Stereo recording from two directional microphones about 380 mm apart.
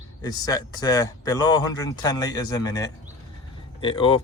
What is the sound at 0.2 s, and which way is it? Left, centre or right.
Speech, centre.